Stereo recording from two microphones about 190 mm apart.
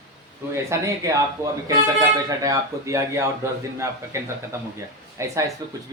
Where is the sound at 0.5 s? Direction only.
15° right (ahead or behind).